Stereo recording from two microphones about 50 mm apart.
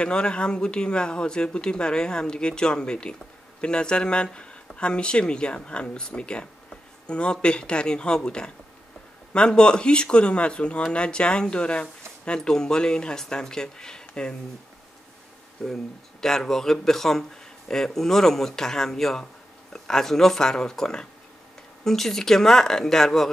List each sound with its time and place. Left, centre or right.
0.0 s speech: centre
15.6 s speech: centre